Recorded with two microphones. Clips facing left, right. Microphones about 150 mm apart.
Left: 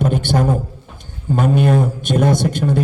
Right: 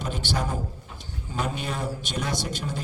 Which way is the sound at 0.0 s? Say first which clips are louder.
Left 12 dB; 55° left (ahead or behind).